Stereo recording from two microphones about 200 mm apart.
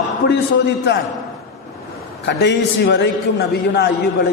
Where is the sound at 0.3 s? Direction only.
60° left (ahead or behind).